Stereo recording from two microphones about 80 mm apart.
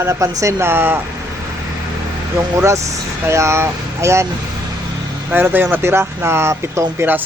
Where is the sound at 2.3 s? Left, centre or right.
Right.